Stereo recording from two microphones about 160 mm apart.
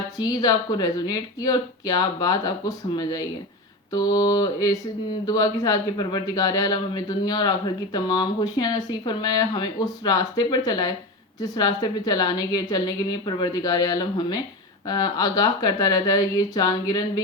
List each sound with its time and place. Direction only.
0.2 s a man's voice: 25° left (ahead or behind)